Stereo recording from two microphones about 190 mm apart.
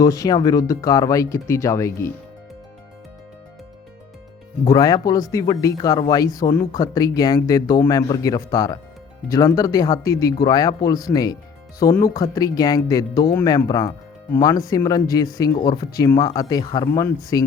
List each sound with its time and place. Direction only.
0.0 s speech: 20° left (ahead or behind)
4.6 s speech: 20° left (ahead or behind)